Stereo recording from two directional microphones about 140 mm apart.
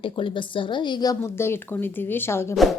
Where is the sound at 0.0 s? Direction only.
35° left (ahead or behind).